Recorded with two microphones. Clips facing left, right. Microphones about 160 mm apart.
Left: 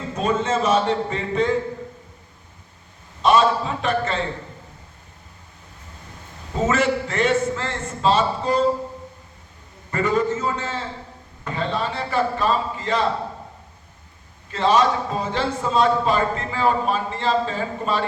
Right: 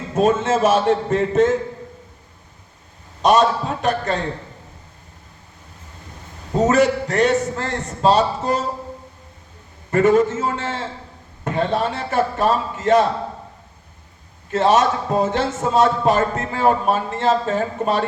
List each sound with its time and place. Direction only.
0.1 s a man's voice: 50° right (ahead or behind)
3.2 s a man's voice: 40° right (ahead or behind)
6.6 s a man's voice: 40° right (ahead or behind)
9.9 s a man's voice: 50° right (ahead or behind)
14.5 s a man's voice: 45° right (ahead or behind)